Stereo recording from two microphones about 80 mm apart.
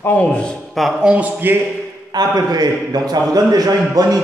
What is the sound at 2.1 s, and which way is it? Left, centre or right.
A man's voice, right.